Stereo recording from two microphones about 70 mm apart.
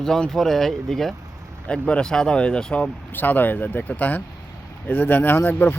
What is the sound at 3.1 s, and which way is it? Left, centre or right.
Speech, left.